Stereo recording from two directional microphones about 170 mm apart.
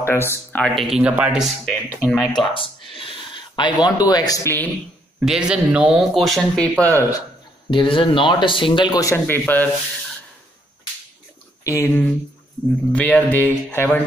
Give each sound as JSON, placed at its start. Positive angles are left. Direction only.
{"t": 0.0, "sound": "speech", "side_deg": 15}
{"t": 0.8, "sound": "speech", "side_deg": -5}
{"t": 2.3, "sound": "speech", "side_deg": 30}
{"t": 5.2, "sound": "speech", "side_deg": -5}
{"t": 6.8, "sound": "speech", "side_deg": 15}
{"t": 7.7, "sound": "speech", "side_deg": 30}
{"t": 11.6, "sound": "speech", "side_deg": 15}